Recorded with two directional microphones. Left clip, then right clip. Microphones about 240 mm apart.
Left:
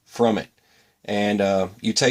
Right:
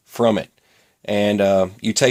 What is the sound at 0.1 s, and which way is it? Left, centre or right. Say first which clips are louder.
Speech: right 3 dB; right.